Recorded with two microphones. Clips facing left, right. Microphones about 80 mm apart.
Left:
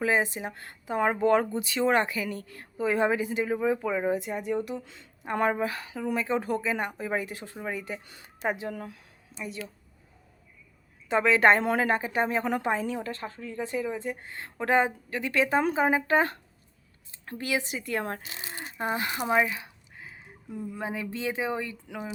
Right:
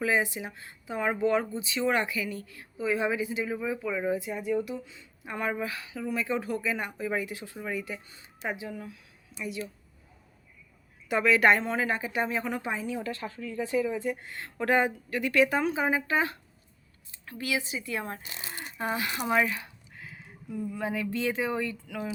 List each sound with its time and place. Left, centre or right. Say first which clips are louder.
0.0 s a woman's voice: left 1 dB; left
1.8 s a woman's voice: left 3 dB; left
4.3 s a woman's voice: even; left
8.0 s speech: left 3 dB; left
8.8 s speech: left 2 dB; left
11.1 s speech: left 2 dB; left
11.6 s a woman's voice: left 4 dB; left
13.1 s a woman's voice: right 1 dB; left
13.6 s speech: right 3 dB; centre
13.8 s a woman's voice: right 2 dB; left
15.6 s speech: left 3 dB; left
17.1 s a sound: left 2 dB; left
17.6 s a woman's voice: left 3 dB; left
18.6 s speech: left 1 dB; left